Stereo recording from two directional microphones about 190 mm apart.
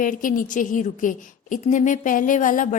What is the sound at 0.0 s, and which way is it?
A woman's voice, 45° left (ahead or behind).